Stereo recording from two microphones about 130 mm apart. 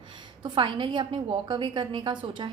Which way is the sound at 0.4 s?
40° right (ahead or behind).